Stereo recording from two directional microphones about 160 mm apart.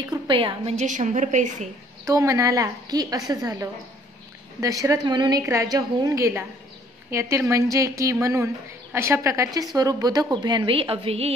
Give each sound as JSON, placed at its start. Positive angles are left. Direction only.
{"t": 0.1, "sound": "a woman's voice", "side_deg": -30}
{"t": 2.0, "sound": "a woman's voice", "side_deg": -20}